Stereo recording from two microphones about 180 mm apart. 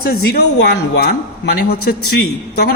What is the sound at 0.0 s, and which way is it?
A man's voice, 60° left (ahead or behind).